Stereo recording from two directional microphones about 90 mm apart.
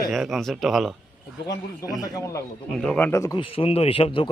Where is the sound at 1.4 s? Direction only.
45° left (ahead or behind).